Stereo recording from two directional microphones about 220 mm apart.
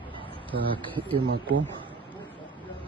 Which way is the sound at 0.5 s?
45° right (ahead or behind).